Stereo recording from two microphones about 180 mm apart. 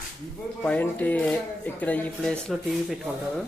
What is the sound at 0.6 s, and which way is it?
Speech, 10° left (ahead or behind).